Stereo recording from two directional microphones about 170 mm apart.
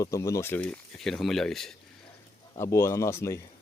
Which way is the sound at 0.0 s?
15° left (ahead or behind).